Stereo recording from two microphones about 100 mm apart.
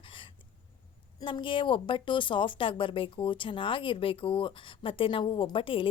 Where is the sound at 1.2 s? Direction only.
55° left (ahead or behind).